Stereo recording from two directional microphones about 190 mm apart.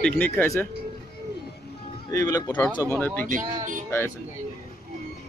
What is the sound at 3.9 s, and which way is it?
Speech, 15° left (ahead or behind).